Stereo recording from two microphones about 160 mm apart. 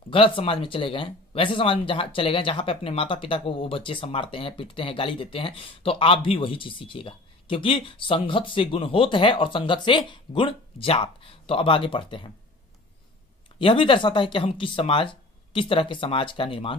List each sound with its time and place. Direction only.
0.1 s speech: 35° left (ahead or behind)
13.6 s speech: 35° left (ahead or behind)